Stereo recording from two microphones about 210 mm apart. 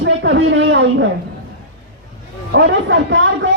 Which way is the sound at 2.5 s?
60° right (ahead or behind).